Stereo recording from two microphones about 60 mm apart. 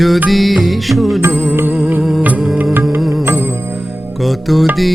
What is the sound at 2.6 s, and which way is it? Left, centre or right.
Music, right.